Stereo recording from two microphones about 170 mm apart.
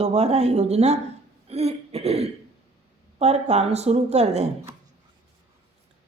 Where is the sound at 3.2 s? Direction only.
40° right (ahead or behind).